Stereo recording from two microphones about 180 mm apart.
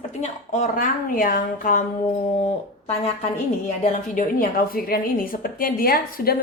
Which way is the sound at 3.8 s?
45° left (ahead or behind).